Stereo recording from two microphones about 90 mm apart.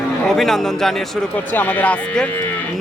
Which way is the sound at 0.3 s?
5° left (ahead or behind).